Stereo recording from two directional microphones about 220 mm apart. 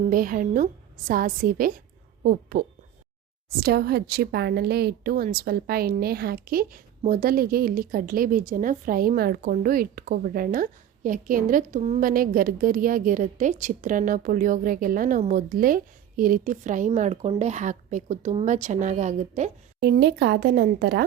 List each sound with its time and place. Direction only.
0.0 s a woman's voice: 40° right (ahead or behind)
19.8 s speech: 50° right (ahead or behind)